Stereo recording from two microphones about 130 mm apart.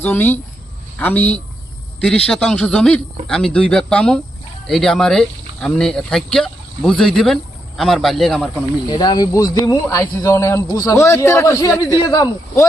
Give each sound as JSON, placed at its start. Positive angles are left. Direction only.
{"t": 0.0, "sound": "speech", "side_deg": 15}
{"t": 8.9, "sound": "speech", "side_deg": 35}